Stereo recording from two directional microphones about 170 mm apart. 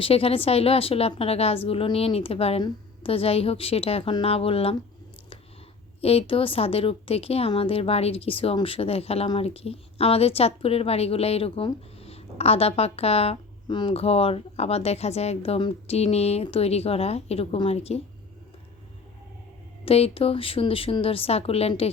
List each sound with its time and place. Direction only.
0.0 s a woman's voice: 35° left (ahead or behind)
6.0 s a woman's voice: 35° left (ahead or behind)
19.8 s a woman's voice: 35° left (ahead or behind)